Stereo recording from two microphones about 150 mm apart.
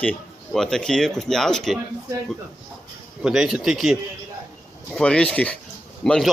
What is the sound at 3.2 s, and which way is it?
Speech, 5° right (ahead or behind).